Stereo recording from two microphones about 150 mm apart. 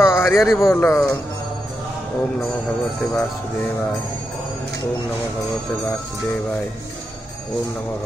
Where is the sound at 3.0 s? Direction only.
10° left (ahead or behind).